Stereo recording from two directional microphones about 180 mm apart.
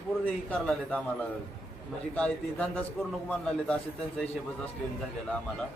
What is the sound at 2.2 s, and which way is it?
A man's voice, 5° left (ahead or behind).